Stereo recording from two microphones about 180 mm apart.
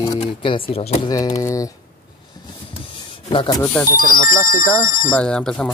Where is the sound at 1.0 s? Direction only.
20° left (ahead or behind).